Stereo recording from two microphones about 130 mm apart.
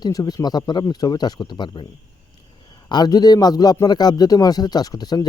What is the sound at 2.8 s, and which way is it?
A man's voice, 35° left (ahead or behind).